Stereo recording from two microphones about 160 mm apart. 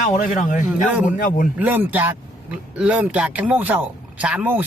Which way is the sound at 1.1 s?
60° left (ahead or behind).